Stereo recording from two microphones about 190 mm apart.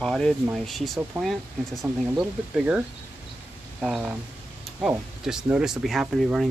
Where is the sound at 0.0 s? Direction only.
Centre (ahead or behind).